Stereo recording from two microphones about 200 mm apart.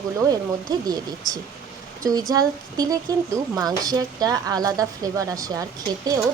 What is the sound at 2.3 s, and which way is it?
A woman's voice, 20° right (ahead or behind).